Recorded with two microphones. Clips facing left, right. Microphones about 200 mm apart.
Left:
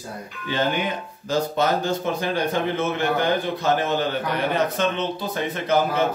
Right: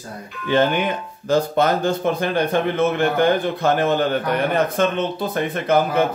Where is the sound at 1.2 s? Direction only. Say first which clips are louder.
Right 4 dB; 55° right (ahead or behind).